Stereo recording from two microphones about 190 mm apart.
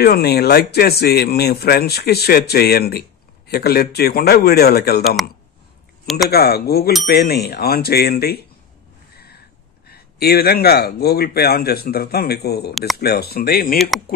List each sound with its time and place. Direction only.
0.0 s speech: 55° left (ahead or behind)
6.0 s speech: centre (ahead or behind)
6.3 s speech: 55° left (ahead or behind)
9.1 s a sound: 55° left (ahead or behind)
9.8 s speech: 55° left (ahead or behind)
13.7 s speech: centre (ahead or behind)